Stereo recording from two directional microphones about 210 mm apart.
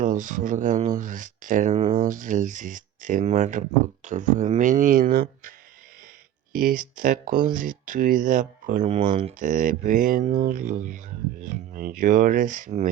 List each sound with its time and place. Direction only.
0.0 s speech: 40° right (ahead or behind)